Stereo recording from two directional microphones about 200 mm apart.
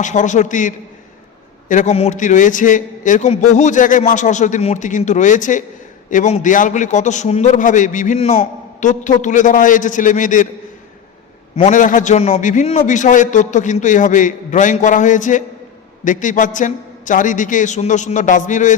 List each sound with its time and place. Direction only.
0.0 s a man's voice: 40° left (ahead or behind)
11.5 s a man's voice: 35° left (ahead or behind)